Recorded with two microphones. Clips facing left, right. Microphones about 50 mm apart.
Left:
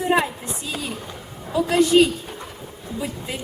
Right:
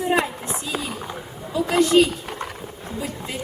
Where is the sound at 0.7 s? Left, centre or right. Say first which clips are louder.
Right 3 dB; centre.